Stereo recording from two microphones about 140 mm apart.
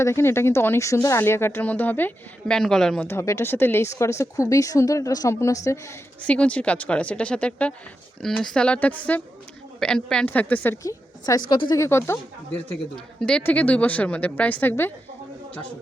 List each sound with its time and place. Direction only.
0.0 s speech: 20° left (ahead or behind)
3.1 s speech: 20° left (ahead or behind)
6.2 s speech: 10° left (ahead or behind); by 11.8 s 35° left (ahead or behind)
11.8 s speech: 20° left (ahead or behind)
13.1 s speech: 5° left (ahead or behind)